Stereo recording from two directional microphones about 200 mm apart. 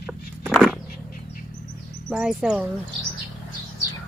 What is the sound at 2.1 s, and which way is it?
Speech, 5° right (ahead or behind).